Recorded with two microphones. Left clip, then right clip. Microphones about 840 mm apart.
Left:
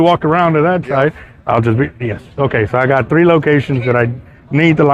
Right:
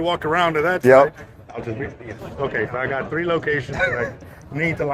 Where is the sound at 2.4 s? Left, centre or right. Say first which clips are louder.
Left 9 dB; left.